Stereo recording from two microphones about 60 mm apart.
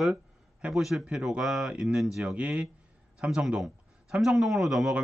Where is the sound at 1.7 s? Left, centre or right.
Centre.